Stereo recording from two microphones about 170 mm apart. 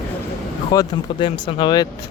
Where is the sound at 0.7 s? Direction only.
30° left (ahead or behind).